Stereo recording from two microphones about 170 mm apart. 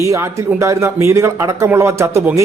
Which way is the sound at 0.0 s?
15° right (ahead or behind).